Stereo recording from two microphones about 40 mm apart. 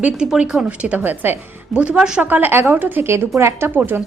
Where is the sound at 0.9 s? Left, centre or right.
Right.